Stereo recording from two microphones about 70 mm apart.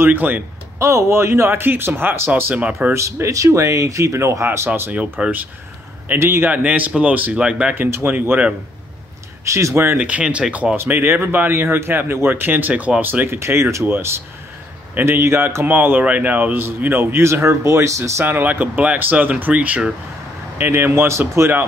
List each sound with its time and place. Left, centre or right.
0.0 s speech: right
0.7 s a man's voice: right
2.5 s speech: centre
2.9 s speech: right
5.2 s speech: centre
6.1 s a man's voice: right
6.5 s speech: right
7.7 s a man's voice: right
9.4 s speech: right
9.9 s speech: centre
10.8 s a man's voice: right
13.4 s a man's voice: right
18.2 s a man's voice: right